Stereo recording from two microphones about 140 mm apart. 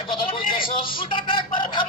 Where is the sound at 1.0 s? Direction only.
35° left (ahead or behind).